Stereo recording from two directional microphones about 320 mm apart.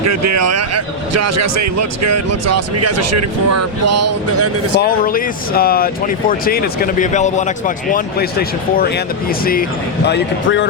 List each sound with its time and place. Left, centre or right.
0.1 s a man's voice: right
4.8 s speech: left